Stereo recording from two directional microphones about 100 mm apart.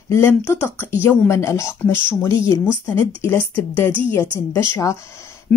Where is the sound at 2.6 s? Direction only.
20° left (ahead or behind).